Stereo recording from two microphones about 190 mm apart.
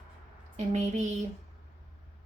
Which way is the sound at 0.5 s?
40° right (ahead or behind).